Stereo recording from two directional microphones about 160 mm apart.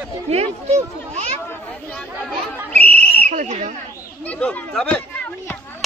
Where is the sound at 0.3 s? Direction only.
40° right (ahead or behind).